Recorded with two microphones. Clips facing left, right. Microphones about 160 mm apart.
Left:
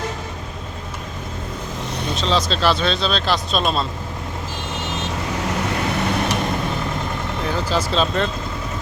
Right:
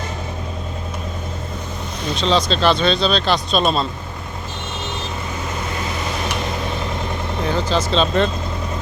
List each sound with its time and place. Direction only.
2.1 s speech: centre (ahead or behind)
5.6 s vehicle: 65° left (ahead or behind)
7.5 s speech: 10° left (ahead or behind)